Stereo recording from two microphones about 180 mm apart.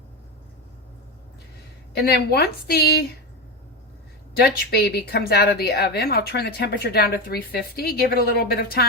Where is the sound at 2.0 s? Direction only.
60° left (ahead or behind).